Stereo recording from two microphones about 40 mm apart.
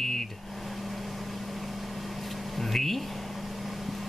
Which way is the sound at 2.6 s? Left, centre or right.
Centre.